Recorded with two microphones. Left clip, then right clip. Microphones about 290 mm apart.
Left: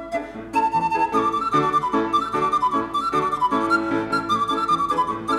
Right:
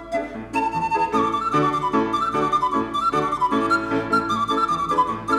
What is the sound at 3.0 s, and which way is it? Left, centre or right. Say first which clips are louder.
Music: right 1 dB; left.